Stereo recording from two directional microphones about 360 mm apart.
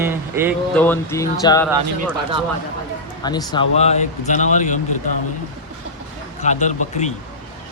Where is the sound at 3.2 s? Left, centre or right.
Centre.